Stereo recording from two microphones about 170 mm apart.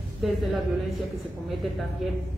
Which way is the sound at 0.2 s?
Centre (ahead or behind).